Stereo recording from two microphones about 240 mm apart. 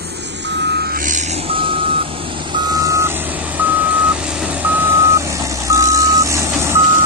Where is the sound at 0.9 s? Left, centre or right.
Right.